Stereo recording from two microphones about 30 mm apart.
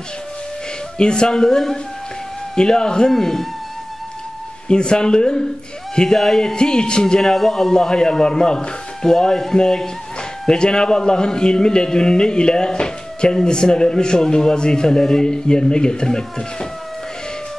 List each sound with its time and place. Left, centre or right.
0.9 s a man's voice: left
3.1 s speech: centre
4.6 s a man's voice: left
6.0 s speech: centre
6.5 s a man's voice: left
7.2 s speech: centre
7.7 s a man's voice: left